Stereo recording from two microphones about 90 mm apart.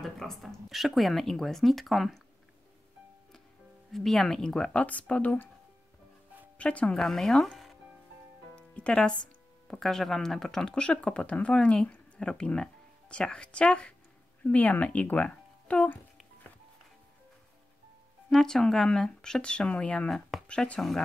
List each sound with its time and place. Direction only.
0.0 s speech: 5° left (ahead or behind)
3.9 s speech: 5° left (ahead or behind)
6.6 s speech: 15° left (ahead or behind)
7.0 s speech: centre (ahead or behind)
8.5 s music: 10° left (ahead or behind)
9.7 s speech: 5° left (ahead or behind)
18.3 s speech: 5° left (ahead or behind)